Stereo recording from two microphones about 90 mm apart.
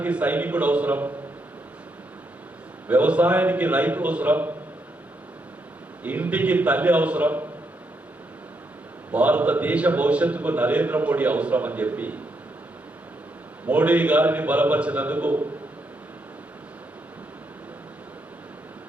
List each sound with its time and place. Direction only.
0.0 s a man's voice: 15° right (ahead or behind)
2.8 s a man's voice: 15° right (ahead or behind)
6.0 s a man's voice: 15° right (ahead or behind)
9.1 s a man's voice: 15° right (ahead or behind)
13.7 s a man's voice: 15° right (ahead or behind)